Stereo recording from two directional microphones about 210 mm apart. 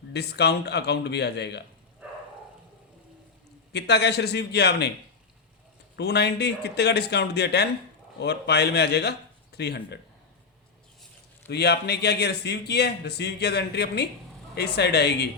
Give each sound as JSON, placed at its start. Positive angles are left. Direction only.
{"t": 0.1, "sound": "a man's voice", "side_deg": 50}
{"t": 2.0, "sound": "a sound", "side_deg": -5}
{"t": 3.7, "sound": "a man's voice", "side_deg": 50}
{"t": 6.0, "sound": "a man's voice", "side_deg": 50}
{"t": 11.4, "sound": "a man's voice", "side_deg": 50}